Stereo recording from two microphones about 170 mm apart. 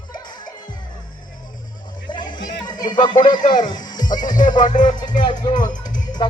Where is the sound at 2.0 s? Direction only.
25° left (ahead or behind).